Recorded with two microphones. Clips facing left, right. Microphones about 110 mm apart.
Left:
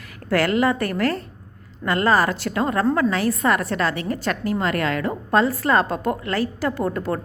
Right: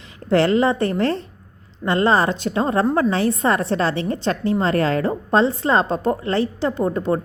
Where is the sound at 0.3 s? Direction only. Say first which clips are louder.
Right 3 dB; 25° right (ahead or behind).